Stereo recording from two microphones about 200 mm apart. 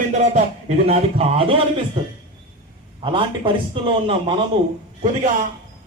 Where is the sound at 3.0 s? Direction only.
25° right (ahead or behind).